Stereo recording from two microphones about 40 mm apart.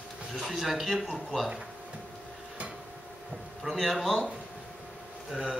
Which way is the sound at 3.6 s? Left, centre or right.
Centre.